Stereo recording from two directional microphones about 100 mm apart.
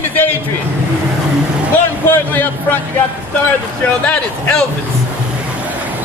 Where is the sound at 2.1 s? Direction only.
20° left (ahead or behind).